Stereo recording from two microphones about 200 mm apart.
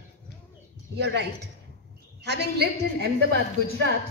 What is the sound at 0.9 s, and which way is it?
A woman's voice, 55° right (ahead or behind).